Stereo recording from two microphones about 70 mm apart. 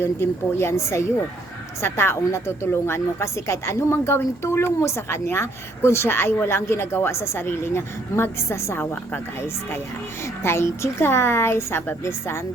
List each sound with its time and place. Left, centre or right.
0.0 s a woman's voice: left